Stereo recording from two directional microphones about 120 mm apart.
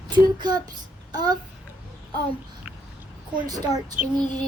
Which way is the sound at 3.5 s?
35° right (ahead or behind).